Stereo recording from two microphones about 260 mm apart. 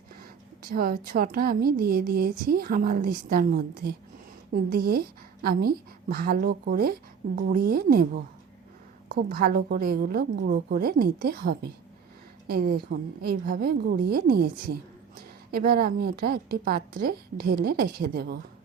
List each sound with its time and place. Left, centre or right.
0.6 s a woman's voice: right
15.5 s a woman's voice: right